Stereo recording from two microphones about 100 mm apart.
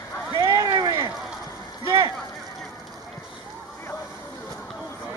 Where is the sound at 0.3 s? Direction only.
35° right (ahead or behind).